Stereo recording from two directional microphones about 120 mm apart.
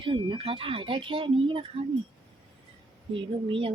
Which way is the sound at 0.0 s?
45° right (ahead or behind).